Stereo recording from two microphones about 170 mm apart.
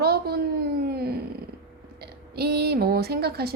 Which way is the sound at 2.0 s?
70° right (ahead or behind).